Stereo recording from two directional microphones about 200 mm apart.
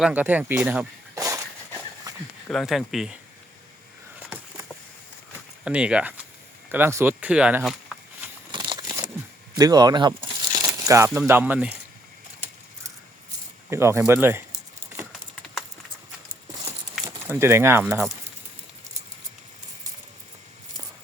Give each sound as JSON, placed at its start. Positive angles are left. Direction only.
{"t": 0.0, "sound": "speech", "side_deg": -10}
{"t": 2.5, "sound": "speech", "side_deg": 0}
{"t": 5.6, "sound": "speech", "side_deg": -5}
{"t": 8.5, "sound": "a sound", "side_deg": -20}
{"t": 10.8, "sound": "speech", "side_deg": -15}
{"t": 13.7, "sound": "speech", "side_deg": -15}
{"t": 17.1, "sound": "speech", "side_deg": -10}